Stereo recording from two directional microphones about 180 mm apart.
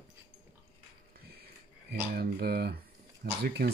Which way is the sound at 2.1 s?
60° right (ahead or behind).